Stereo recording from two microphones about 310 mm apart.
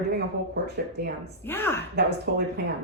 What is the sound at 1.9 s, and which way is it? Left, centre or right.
Speech, right.